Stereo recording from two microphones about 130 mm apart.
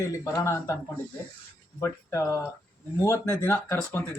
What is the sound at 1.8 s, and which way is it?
Speech, 20° left (ahead or behind).